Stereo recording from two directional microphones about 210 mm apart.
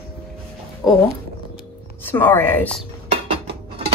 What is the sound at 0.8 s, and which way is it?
Speech, centre (ahead or behind).